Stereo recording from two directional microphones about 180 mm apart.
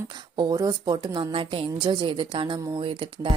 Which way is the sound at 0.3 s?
20° right (ahead or behind).